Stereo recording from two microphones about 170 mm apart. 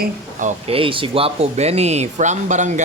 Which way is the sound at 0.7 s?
30° right (ahead or behind).